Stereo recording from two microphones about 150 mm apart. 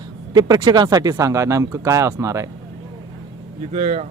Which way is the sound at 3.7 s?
50° right (ahead or behind).